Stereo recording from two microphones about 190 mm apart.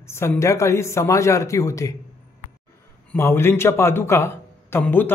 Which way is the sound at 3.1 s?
15° left (ahead or behind).